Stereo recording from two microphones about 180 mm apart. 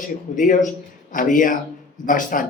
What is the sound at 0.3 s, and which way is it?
A man's voice, 45° left (ahead or behind).